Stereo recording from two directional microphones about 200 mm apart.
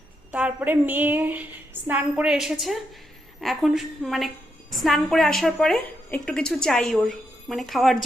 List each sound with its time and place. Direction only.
0.3 s a woman's voice: 5° right (ahead or behind)